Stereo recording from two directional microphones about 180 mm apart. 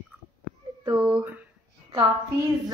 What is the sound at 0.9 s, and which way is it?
Speech, 5° right (ahead or behind).